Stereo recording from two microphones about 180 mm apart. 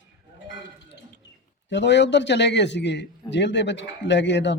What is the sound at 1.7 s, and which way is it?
A man's voice, 75° left (ahead or behind).